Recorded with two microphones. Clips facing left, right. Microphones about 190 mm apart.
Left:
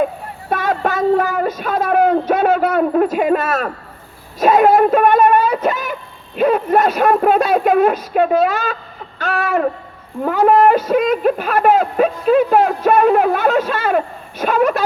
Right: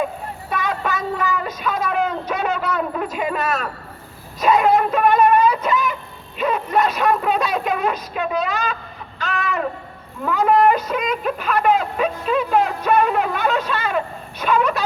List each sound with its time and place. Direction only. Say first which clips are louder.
0.5 s a sound: left 6 dB; 50° left (ahead or behind)
4.4 s speech: left 5 dB; 50° left (ahead or behind)
9.1 s music: left 6 dB; 50° left (ahead or behind)
10.2 s speech: left 4 dB; 45° left (ahead or behind)